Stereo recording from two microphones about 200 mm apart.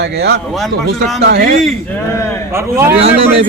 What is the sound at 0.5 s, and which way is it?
Speech, centre (ahead or behind).